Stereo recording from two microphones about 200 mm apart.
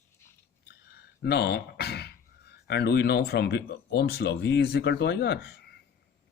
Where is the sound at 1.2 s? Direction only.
55° left (ahead or behind).